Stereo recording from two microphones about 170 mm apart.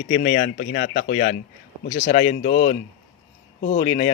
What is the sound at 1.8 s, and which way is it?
Speech, 50° left (ahead or behind).